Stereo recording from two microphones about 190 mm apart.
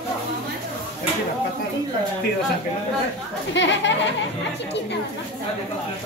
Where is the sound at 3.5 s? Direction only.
70° left (ahead or behind).